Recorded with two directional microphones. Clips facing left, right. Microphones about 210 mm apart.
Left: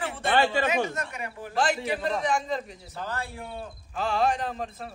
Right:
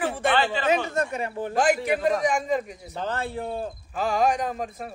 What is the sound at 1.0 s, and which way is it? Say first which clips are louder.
Speech: right 8 dB; 30° right (ahead or behind).